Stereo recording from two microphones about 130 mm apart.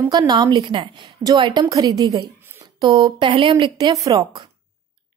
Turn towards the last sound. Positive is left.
turn(degrees=-25)  # may be behind; listen again after turning